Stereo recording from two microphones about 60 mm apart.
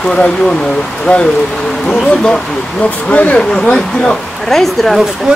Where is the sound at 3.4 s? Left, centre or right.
Centre.